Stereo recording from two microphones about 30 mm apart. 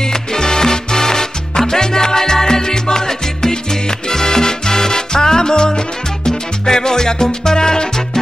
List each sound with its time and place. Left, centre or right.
0.1 s music: left
4.1 s salsa music: centre